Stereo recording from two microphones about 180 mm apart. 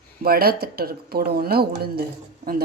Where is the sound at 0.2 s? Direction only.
55° right (ahead or behind).